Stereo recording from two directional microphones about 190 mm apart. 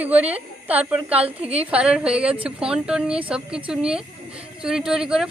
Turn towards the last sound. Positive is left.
turn(degrees=-5)  # may be behind; listen again after turning